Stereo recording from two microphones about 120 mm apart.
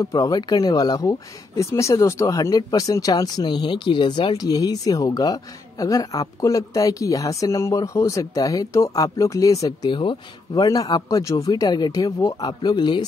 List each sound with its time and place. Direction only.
0.0 s speech: 25° left (ahead or behind); by 4.4 s 45° left (ahead or behind)
4.4 s speech: 30° left (ahead or behind)